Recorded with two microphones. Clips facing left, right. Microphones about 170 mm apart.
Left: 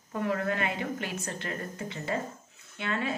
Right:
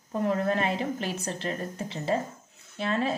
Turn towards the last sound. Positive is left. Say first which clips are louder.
# right 4 dB
turn(degrees=-35)  # may be behind; listen again after turning